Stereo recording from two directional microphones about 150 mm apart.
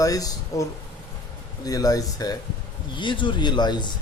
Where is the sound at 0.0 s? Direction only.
25° left (ahead or behind).